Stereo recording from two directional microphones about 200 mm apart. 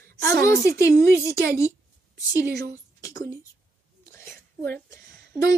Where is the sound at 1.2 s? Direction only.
10° right (ahead or behind).